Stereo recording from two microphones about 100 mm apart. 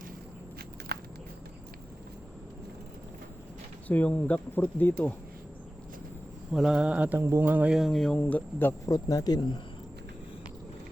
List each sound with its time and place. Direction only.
3.8 s speech: 15° left (ahead or behind)
6.5 s mantra: 5° right (ahead or behind)
7.2 s speech: 25° right (ahead or behind)
7.8 s speech: 5° left (ahead or behind)
8.1 s speech: 15° left (ahead or behind)
8.9 s speech: 40° left (ahead or behind)